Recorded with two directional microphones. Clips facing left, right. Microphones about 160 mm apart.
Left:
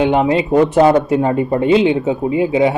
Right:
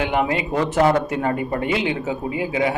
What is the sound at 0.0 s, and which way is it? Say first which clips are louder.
Speech: left 7 dB; 25° left (ahead or behind).